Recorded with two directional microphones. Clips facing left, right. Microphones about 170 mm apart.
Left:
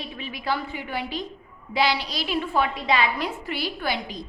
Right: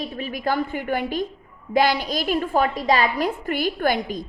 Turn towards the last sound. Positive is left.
turn(degrees=-50)  # may be behind; listen again after turning